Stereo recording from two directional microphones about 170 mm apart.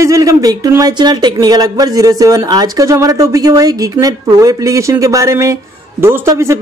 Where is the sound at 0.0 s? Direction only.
20° right (ahead or behind).